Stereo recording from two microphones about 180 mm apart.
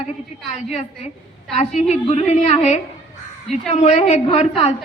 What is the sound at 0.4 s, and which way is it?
A woman's voice, 40° left (ahead or behind).